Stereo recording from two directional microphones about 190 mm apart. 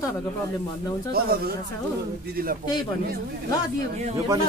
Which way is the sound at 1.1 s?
55° right (ahead or behind).